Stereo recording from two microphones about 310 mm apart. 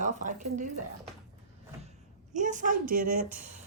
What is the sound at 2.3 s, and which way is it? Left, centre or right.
Speech, right.